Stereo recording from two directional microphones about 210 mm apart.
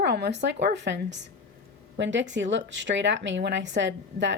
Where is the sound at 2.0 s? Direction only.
60° right (ahead or behind).